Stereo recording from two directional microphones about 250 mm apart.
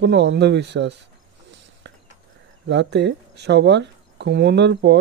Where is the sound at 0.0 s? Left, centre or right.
Right.